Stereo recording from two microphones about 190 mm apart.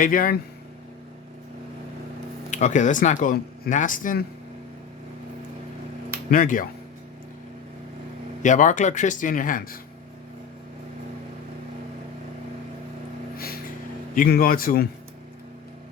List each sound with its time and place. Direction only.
0.0 s speech: 45° left (ahead or behind)
2.5 s speech: 40° left (ahead or behind)
6.3 s speech: 45° left (ahead or behind)
8.4 s speech: 40° left (ahead or behind)
13.3 s vehicle: 50° left (ahead or behind)
14.2 s speech: 50° left (ahead or behind)